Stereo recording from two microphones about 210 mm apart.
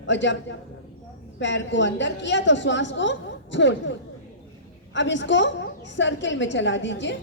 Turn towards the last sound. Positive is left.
turn(degrees=60)  # may be behind; listen again after turning